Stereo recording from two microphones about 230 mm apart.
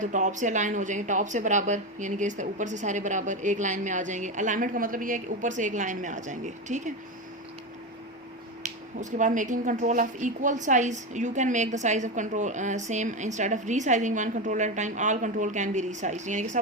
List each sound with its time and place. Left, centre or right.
0.0 s a woman's voice: right
9.0 s a woman's voice: right